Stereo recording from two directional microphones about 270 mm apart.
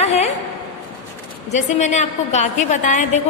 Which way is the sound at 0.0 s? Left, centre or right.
Left.